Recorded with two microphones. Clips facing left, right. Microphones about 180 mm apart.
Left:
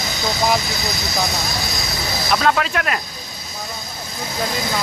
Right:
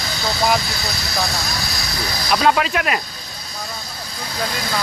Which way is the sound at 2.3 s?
5° right (ahead or behind).